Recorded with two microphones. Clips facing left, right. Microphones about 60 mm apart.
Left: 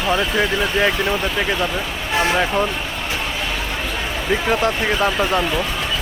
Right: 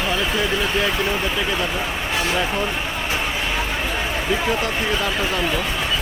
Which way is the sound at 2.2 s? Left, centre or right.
Left.